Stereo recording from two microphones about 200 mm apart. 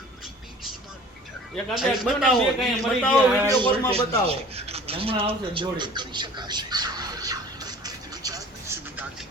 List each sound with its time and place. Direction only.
1.7 s a man's voice: centre (ahead or behind)
3.4 s speech: 20° right (ahead or behind)
3.9 s a sound: 30° right (ahead or behind); by 9.0 s 15° right (ahead or behind)